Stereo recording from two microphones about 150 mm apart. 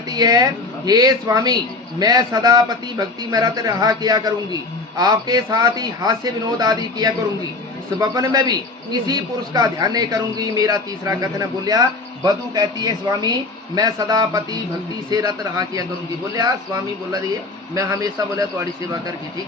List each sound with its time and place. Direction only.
0.1 s a man's voice: 25° right (ahead or behind)
17.7 s a man's voice: 25° right (ahead or behind)